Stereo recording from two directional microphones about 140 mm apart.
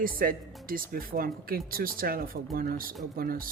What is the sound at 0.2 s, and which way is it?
Speech, 90° right.